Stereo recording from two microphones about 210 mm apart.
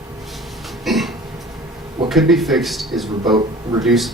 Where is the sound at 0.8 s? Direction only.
Centre (ahead or behind).